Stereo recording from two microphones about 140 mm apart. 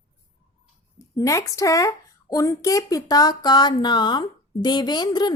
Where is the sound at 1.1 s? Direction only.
25° left (ahead or behind).